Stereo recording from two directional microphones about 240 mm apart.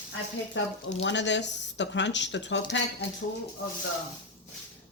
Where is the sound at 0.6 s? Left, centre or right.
Left.